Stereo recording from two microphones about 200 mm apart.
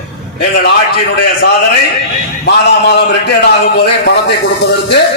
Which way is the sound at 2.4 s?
55° left (ahead or behind).